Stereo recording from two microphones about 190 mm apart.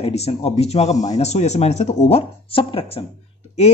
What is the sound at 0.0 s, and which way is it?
Speech, 30° left (ahead or behind).